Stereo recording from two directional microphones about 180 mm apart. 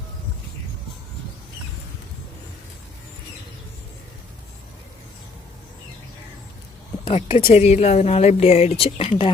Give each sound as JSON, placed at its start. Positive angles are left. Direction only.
{"t": 7.0, "sound": "speech", "side_deg": 35}